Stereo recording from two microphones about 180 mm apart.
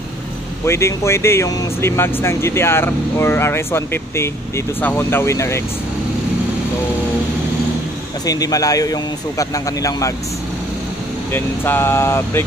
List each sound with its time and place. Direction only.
0.7 s speech: 15° left (ahead or behind)
8.3 s a man's voice: 20° left (ahead or behind)
11.3 s speech: 10° left (ahead or behind)